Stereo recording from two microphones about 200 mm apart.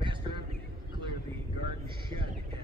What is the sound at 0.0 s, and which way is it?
Horse, 25° right (ahead or behind).